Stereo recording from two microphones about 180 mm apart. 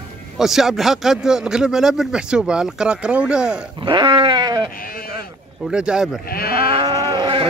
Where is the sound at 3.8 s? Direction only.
25° right (ahead or behind).